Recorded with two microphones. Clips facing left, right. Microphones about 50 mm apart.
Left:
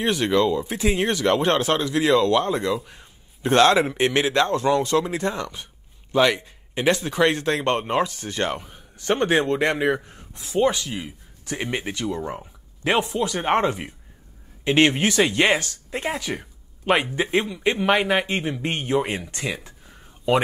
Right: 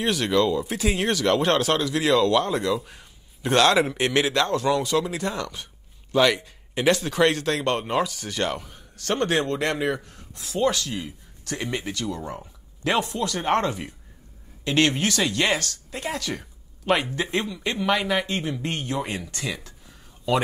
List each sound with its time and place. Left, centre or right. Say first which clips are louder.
0.0 s speech: left 2 dB; centre